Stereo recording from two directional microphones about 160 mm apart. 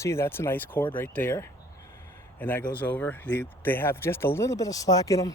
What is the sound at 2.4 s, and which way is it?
A man's voice, 10° left (ahead or behind).